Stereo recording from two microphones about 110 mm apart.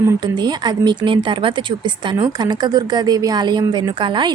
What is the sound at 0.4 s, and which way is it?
Speech, 40° right (ahead or behind).